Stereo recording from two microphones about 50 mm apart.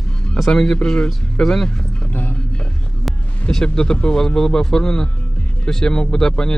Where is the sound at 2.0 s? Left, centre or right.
Left.